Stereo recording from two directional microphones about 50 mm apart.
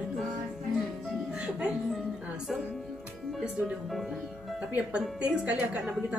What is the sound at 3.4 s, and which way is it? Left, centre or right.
A man's voice, centre.